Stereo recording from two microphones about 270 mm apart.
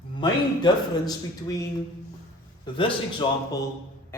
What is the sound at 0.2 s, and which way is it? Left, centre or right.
A man's voice, centre.